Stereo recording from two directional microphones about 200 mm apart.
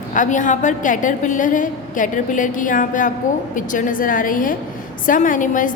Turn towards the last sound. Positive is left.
turn(degrees=40)  # may be behind; listen again after turning